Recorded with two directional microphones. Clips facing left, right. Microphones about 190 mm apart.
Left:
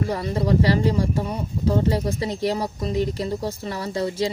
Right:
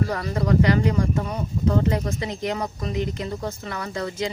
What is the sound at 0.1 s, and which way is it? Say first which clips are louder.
Speech: left 1 dB; 25° left (ahead or behind).